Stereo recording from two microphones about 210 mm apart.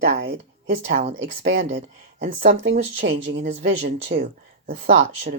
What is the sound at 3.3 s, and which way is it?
Speech, 35° right (ahead or behind).